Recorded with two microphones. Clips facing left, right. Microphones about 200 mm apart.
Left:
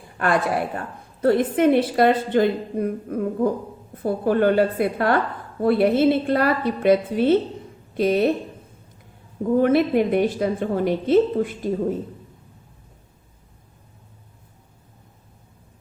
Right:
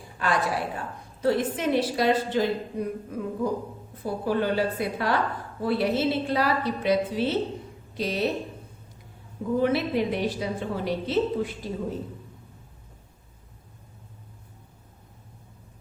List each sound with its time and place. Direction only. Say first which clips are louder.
0.2 s a woman's voice: left 5 dB; 55° left (ahead or behind)
9.6 s a woman's voice: left 6 dB; 50° left (ahead or behind)